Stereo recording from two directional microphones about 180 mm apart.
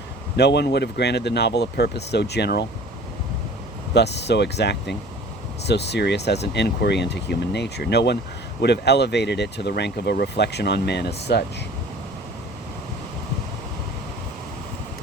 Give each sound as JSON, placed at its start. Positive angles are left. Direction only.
{"t": 0.3, "sound": "speech", "side_deg": 70}
{"t": 3.9, "sound": "speech", "side_deg": 70}